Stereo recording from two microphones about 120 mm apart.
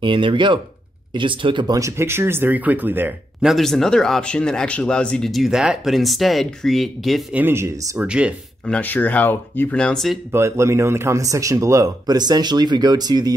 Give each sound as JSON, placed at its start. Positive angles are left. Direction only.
{"t": 0.0, "sound": "speech", "side_deg": -45}
{"t": 1.8, "sound": "speech", "side_deg": -25}
{"t": 3.4, "sound": "a man's voice", "side_deg": 0}
{"t": 7.3, "sound": "speech", "side_deg": -20}
{"t": 8.0, "sound": "speech", "side_deg": -10}
{"t": 8.6, "sound": "speech", "side_deg": 10}
{"t": 10.3, "sound": "speech", "side_deg": -20}